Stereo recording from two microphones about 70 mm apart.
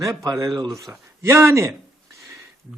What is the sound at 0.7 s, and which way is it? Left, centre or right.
Speech, right.